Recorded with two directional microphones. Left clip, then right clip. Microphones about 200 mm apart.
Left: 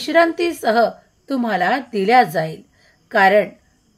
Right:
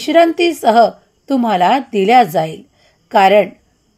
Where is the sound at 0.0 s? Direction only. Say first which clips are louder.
Right 5 dB; 25° right (ahead or behind).